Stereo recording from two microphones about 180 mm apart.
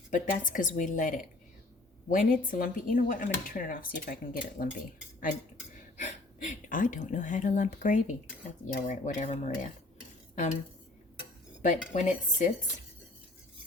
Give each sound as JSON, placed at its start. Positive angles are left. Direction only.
{"t": 0.1, "sound": "speech", "side_deg": 50}
{"t": 6.0, "sound": "speech", "side_deg": 45}
{"t": 8.7, "sound": "cutlery", "side_deg": 40}
{"t": 10.3, "sound": "speech", "side_deg": 40}
{"t": 11.6, "sound": "speech", "side_deg": 45}